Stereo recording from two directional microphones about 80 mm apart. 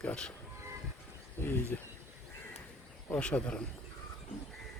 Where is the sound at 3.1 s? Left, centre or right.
Centre.